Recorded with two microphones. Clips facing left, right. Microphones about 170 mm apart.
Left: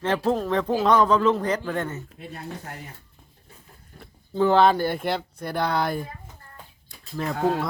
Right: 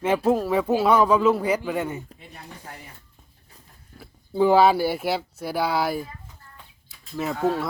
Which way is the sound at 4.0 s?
10° right (ahead or behind).